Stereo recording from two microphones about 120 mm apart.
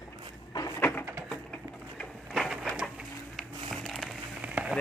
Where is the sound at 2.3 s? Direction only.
5° right (ahead or behind).